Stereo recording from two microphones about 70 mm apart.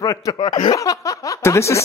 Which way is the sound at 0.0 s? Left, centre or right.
Left.